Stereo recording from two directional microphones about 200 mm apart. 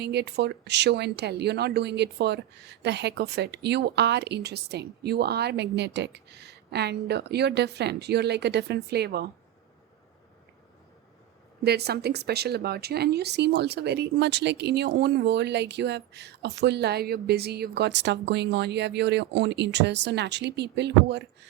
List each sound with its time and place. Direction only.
0.0 s speech: 55° right (ahead or behind)
11.6 s speech: 55° right (ahead or behind)